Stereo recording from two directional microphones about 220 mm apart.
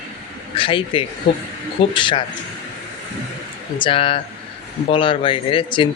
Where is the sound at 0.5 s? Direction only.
25° left (ahead or behind).